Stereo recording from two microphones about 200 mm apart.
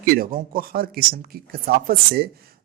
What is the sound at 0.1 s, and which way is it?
Speech, 45° right (ahead or behind).